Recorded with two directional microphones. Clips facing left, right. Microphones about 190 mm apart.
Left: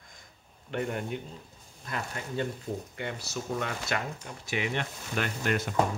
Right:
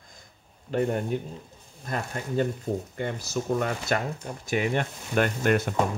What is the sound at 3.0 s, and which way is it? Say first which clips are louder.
Speech: right 6 dB; 45° right (ahead or behind).